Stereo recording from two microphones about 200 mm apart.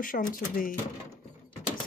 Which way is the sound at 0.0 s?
45° left (ahead or behind).